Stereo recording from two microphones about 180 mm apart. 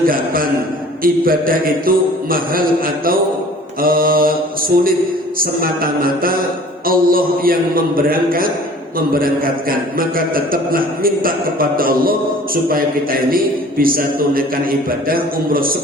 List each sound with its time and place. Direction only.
0.0 s a man's voice: 55° right (ahead or behind)
5.4 s a man's voice: 55° right (ahead or behind)